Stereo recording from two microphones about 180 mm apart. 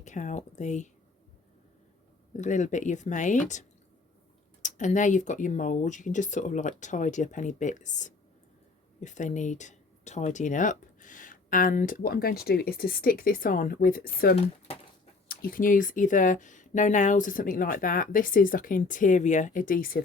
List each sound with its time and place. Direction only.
0.0 s speech: 45° left (ahead or behind)
2.3 s speech: 45° left (ahead or behind)
14.3 s speech: 35° left (ahead or behind)
15.3 s speech: 55° left (ahead or behind)